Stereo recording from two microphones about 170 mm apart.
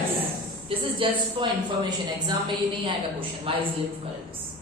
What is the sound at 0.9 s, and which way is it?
A woman's voice, 30° right (ahead or behind).